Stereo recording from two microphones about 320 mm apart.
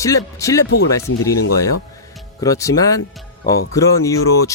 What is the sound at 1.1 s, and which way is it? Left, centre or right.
Speech, left.